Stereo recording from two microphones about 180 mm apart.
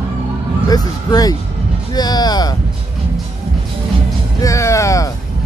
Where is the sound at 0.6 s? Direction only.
20° left (ahead or behind).